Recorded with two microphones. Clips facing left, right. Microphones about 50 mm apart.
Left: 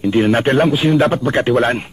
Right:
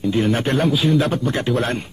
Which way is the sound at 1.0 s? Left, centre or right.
Centre.